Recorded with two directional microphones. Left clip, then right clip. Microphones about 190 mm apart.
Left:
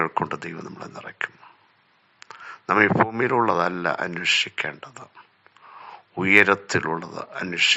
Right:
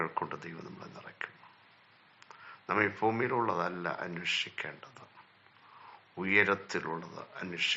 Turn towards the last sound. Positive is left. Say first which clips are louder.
# left 12 dB
turn(degrees=40)  # may be behind; listen again after turning